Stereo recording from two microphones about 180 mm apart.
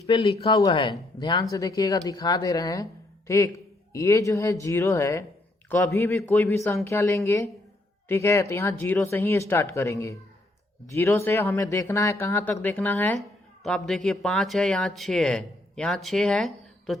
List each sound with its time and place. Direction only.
0.0 s speech: 30° left (ahead or behind); by 17.0 s centre (ahead or behind)